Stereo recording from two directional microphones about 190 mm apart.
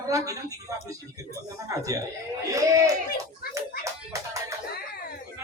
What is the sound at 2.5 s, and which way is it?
Speech, 15° right (ahead or behind).